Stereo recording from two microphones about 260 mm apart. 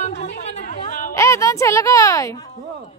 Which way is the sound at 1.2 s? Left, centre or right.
Centre.